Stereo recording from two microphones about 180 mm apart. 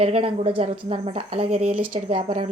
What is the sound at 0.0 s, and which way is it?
A woman's voice, 35° right (ahead or behind).